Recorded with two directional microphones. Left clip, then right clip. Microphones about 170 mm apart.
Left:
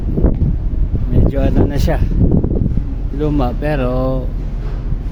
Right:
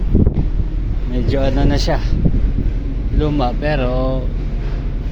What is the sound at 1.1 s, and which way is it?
Speech, 40° left (ahead or behind).